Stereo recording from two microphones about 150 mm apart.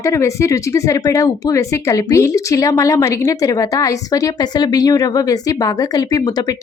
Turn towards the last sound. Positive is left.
turn(degrees=25)  # may be behind; listen again after turning